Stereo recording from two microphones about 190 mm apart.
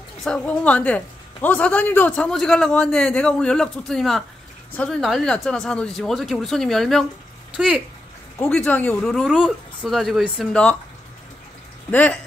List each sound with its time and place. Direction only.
0.2 s a man's voice: 5° left (ahead or behind)
8.4 s a man's voice: 10° left (ahead or behind)
11.9 s speech: 10° left (ahead or behind)